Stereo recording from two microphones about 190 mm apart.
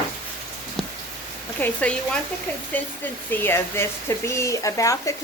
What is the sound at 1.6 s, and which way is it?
Speech, 10° left (ahead or behind).